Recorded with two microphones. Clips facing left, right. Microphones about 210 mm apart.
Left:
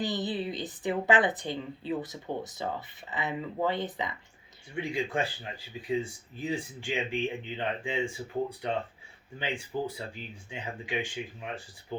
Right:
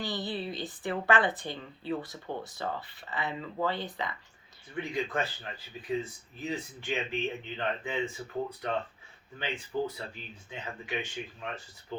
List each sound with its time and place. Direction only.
0.0 s a woman's voice: 20° left (ahead or behind)